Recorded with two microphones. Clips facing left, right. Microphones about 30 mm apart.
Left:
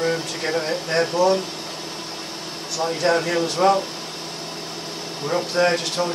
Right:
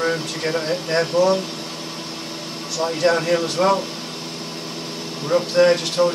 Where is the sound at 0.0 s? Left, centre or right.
Centre.